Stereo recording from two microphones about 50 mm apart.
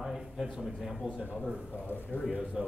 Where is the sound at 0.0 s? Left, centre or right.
Centre.